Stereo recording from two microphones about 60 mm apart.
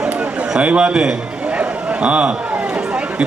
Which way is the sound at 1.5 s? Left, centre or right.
Right.